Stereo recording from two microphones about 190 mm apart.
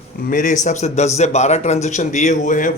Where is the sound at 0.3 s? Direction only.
40° left (ahead or behind).